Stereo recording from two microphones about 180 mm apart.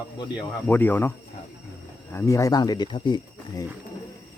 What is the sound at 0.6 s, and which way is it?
Speech, 10° left (ahead or behind).